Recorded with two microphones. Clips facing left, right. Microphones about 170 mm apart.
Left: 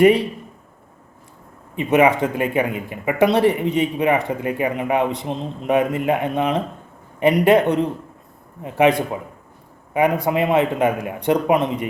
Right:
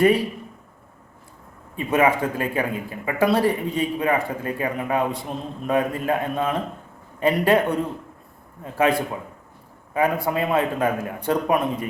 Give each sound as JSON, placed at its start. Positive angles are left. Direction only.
{"t": 0.0, "sound": "speech", "side_deg": 20}
{"t": 1.7, "sound": "speech", "side_deg": 20}